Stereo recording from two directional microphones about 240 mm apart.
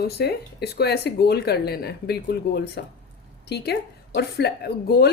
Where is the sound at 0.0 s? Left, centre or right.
Left.